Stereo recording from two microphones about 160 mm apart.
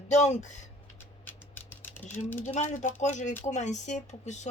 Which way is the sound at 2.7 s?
50° left (ahead or behind).